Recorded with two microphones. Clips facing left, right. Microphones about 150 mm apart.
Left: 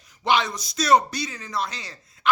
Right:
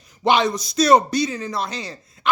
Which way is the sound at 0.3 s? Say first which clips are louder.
Right 5 dB; 20° right (ahead or behind).